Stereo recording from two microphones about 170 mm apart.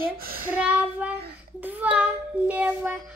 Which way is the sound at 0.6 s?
10° right (ahead or behind).